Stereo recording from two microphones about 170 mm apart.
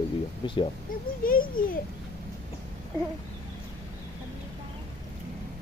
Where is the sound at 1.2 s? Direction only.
55° left (ahead or behind).